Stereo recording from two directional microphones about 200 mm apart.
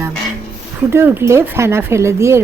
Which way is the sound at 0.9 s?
10° right (ahead or behind).